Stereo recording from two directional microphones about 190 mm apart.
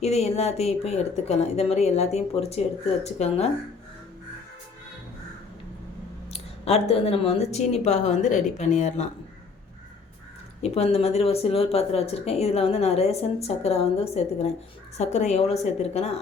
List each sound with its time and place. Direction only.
0.0 s speech: 35° left (ahead or behind)
6.3 s speech: 30° left (ahead or behind)
10.6 s speech: 35° left (ahead or behind)